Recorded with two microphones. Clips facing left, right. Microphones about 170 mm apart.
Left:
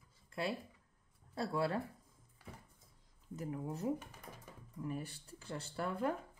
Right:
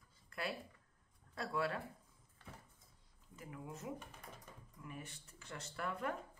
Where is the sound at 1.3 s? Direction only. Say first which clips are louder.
Left 3 dB; 30° left (ahead or behind).